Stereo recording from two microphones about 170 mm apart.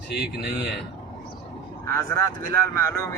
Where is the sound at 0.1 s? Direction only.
70° left (ahead or behind).